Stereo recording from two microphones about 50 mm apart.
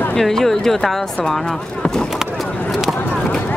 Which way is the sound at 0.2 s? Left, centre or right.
Centre.